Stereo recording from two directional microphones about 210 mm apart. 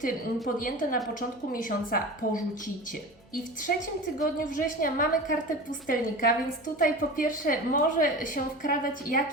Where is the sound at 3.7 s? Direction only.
45° left (ahead or behind).